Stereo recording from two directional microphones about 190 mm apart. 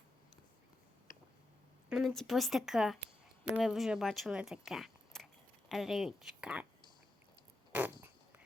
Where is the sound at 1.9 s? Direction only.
Centre (ahead or behind).